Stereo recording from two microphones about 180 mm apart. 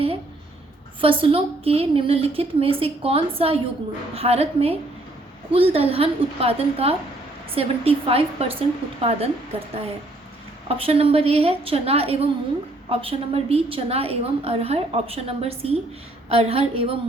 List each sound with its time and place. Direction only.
1.0 s a woman's voice: 30° right (ahead or behind)